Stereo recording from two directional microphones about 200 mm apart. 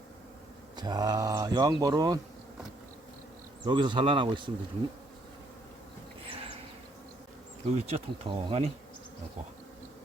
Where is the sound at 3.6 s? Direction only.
25° right (ahead or behind).